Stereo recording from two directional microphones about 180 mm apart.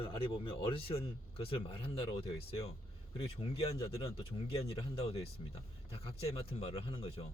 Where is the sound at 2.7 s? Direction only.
30° left (ahead or behind).